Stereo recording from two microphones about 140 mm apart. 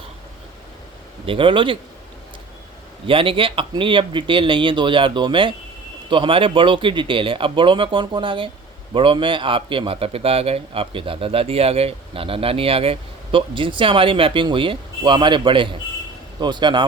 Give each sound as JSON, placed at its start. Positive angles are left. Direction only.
{"t": 1.3, "sound": "a man's voice", "side_deg": -35}
{"t": 3.1, "sound": "a man's voice", "side_deg": -40}